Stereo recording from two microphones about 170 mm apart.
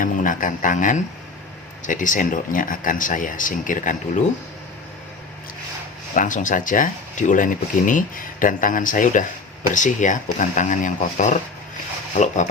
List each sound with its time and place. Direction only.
0.0 s speech: 50° left (ahead or behind)
6.1 s speech: 50° left (ahead or behind)